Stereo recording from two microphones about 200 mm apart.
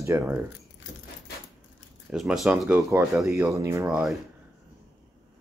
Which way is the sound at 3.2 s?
15° right (ahead or behind).